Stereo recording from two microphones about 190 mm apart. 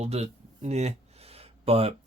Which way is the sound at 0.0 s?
35° right (ahead or behind).